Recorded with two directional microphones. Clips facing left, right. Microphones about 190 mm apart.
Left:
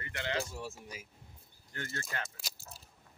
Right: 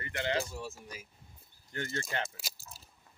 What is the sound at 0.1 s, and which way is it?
Speech, 25° right (ahead or behind).